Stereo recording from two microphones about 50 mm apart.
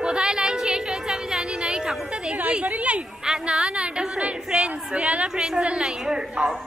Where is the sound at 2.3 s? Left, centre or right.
Right.